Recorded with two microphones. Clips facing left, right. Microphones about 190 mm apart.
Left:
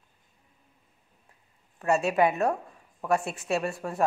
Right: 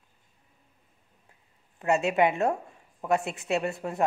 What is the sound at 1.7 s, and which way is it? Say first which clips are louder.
A woman's voice: even; 20° right (ahead or behind).